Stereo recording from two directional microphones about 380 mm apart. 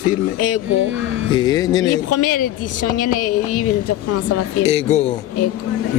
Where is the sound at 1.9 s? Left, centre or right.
Left.